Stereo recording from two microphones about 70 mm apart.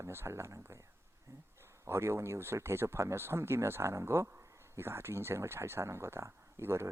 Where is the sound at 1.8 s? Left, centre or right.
Right.